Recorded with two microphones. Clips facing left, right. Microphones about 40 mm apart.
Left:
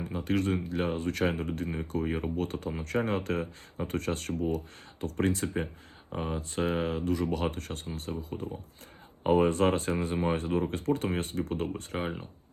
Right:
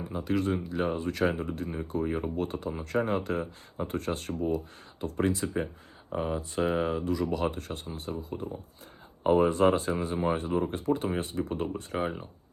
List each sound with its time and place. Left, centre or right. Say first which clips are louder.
0.3 s speech: even; left
6.1 s speech: right 3 dB; centre
6.6 s speech: right 2 dB; left
11.9 s speech: right 3 dB; left